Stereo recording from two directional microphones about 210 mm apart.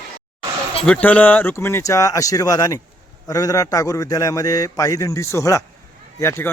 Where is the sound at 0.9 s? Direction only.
5° left (ahead or behind).